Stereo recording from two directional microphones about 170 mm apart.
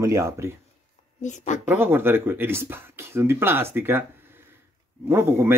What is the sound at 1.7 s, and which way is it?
Speech, 10° right (ahead or behind).